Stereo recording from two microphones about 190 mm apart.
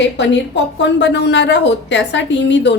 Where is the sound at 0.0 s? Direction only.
70° left (ahead or behind).